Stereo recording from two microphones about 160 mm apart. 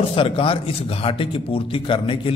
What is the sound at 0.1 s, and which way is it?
A man's voice, 35° left (ahead or behind).